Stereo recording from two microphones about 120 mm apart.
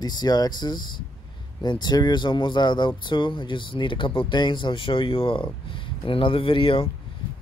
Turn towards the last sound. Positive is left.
turn(degrees=50)  # may be behind; listen again after turning